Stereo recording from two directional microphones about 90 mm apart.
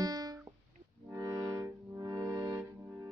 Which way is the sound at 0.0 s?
45° right (ahead or behind).